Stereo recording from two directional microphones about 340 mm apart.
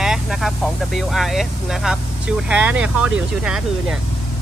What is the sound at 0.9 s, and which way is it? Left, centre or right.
Speech, centre.